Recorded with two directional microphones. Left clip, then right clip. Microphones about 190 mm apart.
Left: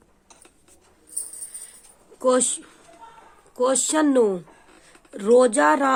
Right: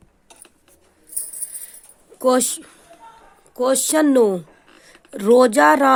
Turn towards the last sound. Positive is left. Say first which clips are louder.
# right 4 dB
turn(degrees=-35)  # may be behind; listen again after turning